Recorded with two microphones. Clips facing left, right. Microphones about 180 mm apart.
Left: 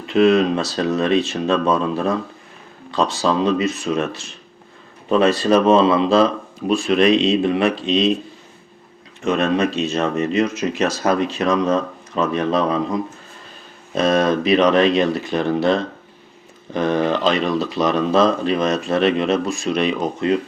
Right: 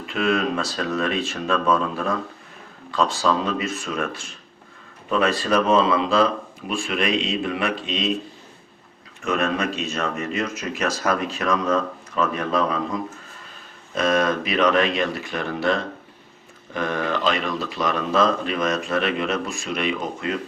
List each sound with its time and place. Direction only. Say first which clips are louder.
0.1 s speech: left 8 dB; 20° left (ahead or behind)
9.2 s speech: left 5 dB; 20° left (ahead or behind)
13.9 s speech: left 4 dB; 25° left (ahead or behind)